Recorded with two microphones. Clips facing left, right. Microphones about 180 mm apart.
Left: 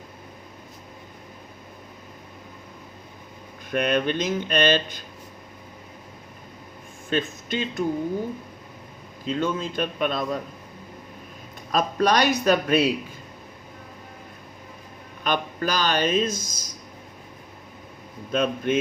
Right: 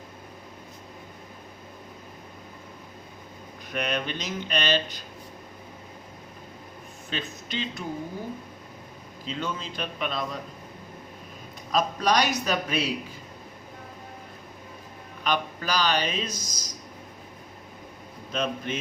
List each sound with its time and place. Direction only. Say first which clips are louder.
3.7 s speech: left 7 dB; 50° left (ahead or behind)
7.1 s speech: left 8 dB; 50° left (ahead or behind)
9.2 s speech: left 7 dB; 50° left (ahead or behind)
11.7 s a man's voice: left 3 dB; 55° left (ahead or behind)
15.2 s speech: left 3 dB; 50° left (ahead or behind)
18.3 s speech: left 6 dB; 50° left (ahead or behind)